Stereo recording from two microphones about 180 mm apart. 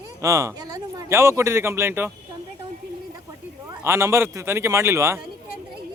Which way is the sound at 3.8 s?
15° right (ahead or behind).